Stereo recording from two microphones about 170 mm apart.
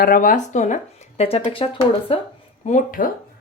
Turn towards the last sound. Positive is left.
turn(degrees=55)  # may be behind; listen again after turning